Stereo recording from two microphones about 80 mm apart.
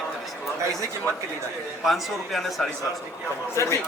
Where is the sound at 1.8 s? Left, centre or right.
Centre.